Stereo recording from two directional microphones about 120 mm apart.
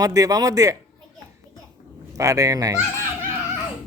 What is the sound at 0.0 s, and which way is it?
Speech, 30° right (ahead or behind).